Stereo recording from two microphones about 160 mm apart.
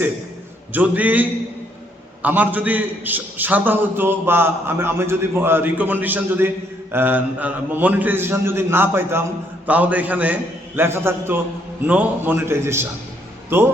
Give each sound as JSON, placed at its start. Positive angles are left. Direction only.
{"t": 0.7, "sound": "a man's voice", "side_deg": -10}